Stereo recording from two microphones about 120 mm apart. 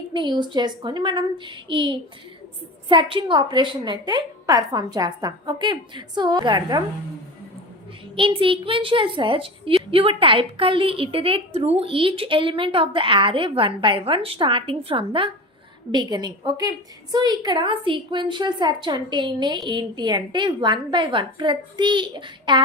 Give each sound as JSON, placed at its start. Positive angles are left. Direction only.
{"t": 0.1, "sound": "a woman's voice", "side_deg": -40}
{"t": 8.1, "sound": "a woman's voice", "side_deg": -45}